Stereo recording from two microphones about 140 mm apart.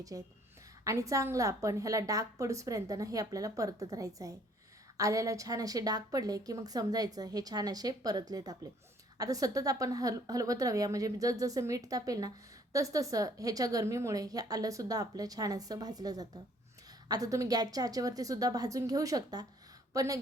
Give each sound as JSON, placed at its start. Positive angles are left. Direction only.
{"t": 0.0, "sound": "a woman's voice", "side_deg": -25}